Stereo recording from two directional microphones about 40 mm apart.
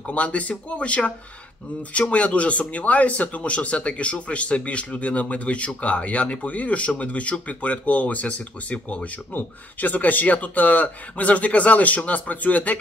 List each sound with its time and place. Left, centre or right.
0.0 s speech: left